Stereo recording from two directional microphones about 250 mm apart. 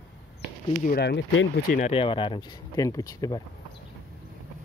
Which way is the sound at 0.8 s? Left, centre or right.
Left.